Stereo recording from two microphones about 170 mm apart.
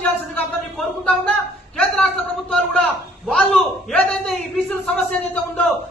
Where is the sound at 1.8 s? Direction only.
5° left (ahead or behind).